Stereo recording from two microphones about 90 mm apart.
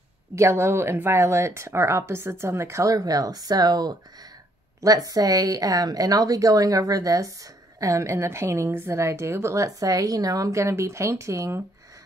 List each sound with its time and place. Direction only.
0.4 s a woman's voice: 30° right (ahead or behind)